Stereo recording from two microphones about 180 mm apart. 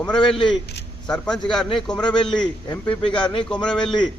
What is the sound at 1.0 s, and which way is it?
A man's voice, 5° left (ahead or behind).